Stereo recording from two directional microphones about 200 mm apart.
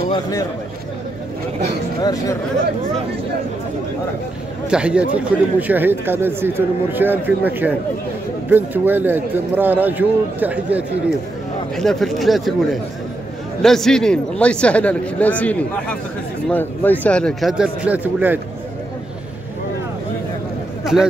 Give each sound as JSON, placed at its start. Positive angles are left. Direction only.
{"t": 0.1, "sound": "speech", "side_deg": 15}
{"t": 2.0, "sound": "speech", "side_deg": 20}
{"t": 4.6, "sound": "speech", "side_deg": -5}
{"t": 20.8, "sound": "speech", "side_deg": 0}